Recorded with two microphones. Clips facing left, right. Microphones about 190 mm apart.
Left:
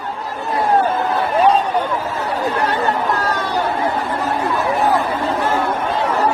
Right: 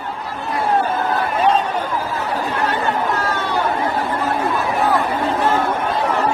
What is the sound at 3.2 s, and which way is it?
Chatter, 40° left (ahead or behind).